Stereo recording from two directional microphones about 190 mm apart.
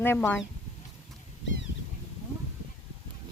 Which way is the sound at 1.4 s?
75° left (ahead or behind).